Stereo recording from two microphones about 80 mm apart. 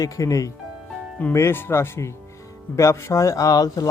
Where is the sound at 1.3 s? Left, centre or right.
Left.